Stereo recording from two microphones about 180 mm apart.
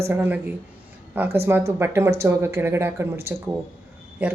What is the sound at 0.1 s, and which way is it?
Speech, 10° right (ahead or behind).